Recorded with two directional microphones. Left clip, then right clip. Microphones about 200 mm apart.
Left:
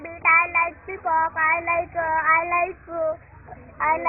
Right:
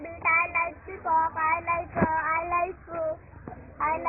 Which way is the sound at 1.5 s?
35° left (ahead or behind).